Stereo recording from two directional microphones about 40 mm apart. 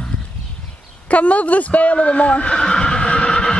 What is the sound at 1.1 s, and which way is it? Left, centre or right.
Neigh, left.